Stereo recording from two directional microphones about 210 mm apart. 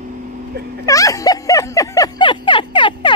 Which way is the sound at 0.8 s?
15° left (ahead or behind).